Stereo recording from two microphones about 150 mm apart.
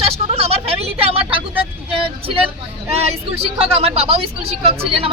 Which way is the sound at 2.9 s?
45° right (ahead or behind).